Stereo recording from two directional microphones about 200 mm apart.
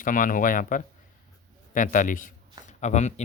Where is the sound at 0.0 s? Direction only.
40° left (ahead or behind).